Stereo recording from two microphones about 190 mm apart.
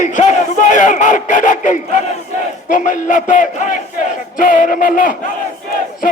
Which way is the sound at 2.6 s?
45° left (ahead or behind).